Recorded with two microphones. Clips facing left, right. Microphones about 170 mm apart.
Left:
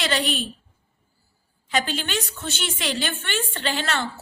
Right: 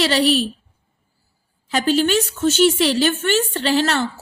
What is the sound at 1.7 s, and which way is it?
A woman's voice, 40° right (ahead or behind).